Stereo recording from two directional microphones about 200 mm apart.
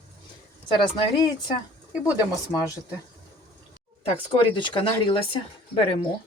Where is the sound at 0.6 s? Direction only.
25° left (ahead or behind).